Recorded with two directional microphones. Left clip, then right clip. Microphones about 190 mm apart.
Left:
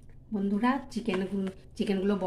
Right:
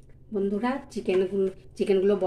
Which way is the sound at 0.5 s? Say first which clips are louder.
Even; 15° left (ahead or behind).